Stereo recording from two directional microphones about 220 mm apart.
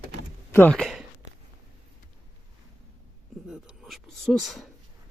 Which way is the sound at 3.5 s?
Centre (ahead or behind).